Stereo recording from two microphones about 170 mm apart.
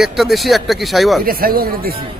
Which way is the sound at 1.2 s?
60° right (ahead or behind).